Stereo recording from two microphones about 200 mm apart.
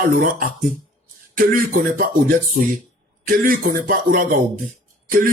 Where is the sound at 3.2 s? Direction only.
45° right (ahead or behind).